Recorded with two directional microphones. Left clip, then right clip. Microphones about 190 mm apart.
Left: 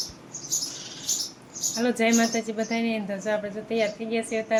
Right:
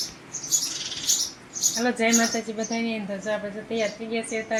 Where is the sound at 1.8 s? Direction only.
30° left (ahead or behind).